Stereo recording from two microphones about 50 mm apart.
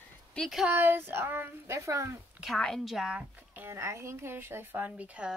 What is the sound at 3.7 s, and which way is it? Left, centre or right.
Speech, right.